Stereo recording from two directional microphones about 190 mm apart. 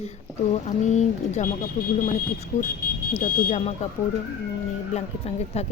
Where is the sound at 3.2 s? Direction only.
45° left (ahead or behind).